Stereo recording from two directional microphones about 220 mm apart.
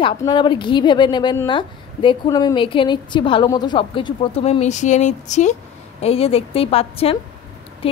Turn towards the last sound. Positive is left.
turn(degrees=25)  # may be behind; listen again after turning